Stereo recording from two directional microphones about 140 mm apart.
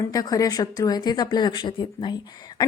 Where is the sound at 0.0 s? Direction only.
25° left (ahead or behind).